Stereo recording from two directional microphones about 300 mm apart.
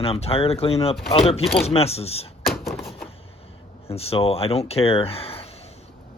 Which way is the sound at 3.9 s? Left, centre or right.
Centre.